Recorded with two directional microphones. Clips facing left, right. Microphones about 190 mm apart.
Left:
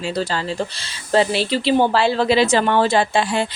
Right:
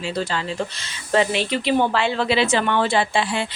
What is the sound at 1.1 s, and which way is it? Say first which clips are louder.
A woman's voice: left 2 dB; 35° left (ahead or behind).